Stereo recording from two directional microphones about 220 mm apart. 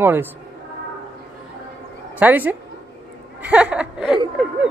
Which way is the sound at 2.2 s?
5° right (ahead or behind).